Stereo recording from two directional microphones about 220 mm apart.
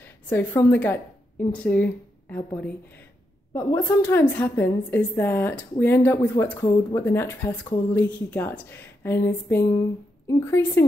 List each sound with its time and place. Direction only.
0.0 s a woman's voice: 10° left (ahead or behind)